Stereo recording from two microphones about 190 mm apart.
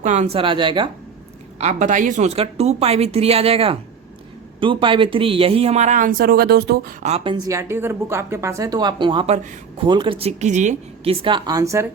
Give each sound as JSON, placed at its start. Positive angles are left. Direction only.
{"t": 0.0, "sound": "speech", "side_deg": -35}
{"t": 1.5, "sound": "speech", "side_deg": -40}
{"t": 7.0, "sound": "speech", "side_deg": -35}
{"t": 7.3, "sound": "speech", "side_deg": -15}